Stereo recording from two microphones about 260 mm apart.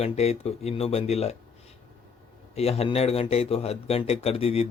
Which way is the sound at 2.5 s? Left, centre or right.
Left.